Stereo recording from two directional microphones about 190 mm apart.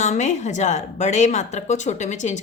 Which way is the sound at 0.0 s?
40° left (ahead or behind).